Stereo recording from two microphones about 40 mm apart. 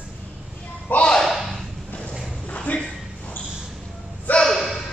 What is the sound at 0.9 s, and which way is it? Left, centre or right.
Slam, left.